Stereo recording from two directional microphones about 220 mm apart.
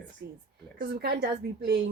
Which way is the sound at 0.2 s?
45° right (ahead or behind).